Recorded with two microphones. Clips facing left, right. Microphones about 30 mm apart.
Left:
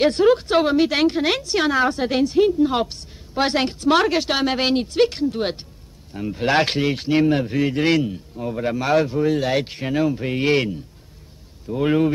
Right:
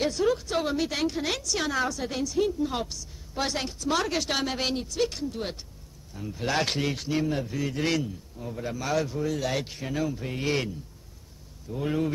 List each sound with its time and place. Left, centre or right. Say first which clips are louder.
0.0 s a woman's voice: left 9 dB; left
4.1 s a woman's voice: left 8 dB; left
7.2 s a woman's voice: left 11 dB; left